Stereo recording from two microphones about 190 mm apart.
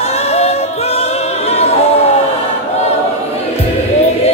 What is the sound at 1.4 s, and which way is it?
Choir, 35° left (ahead or behind).